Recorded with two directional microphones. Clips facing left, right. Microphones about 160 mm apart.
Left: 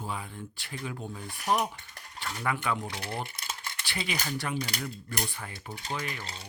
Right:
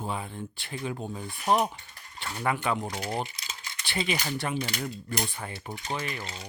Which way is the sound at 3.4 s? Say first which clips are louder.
Left 3 dB; 55° left (ahead or behind).